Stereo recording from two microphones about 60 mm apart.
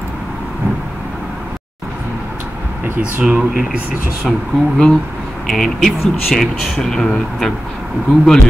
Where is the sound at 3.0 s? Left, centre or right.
Centre.